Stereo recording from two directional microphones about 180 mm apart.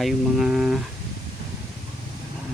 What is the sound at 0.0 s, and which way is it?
Speech, centre (ahead or behind).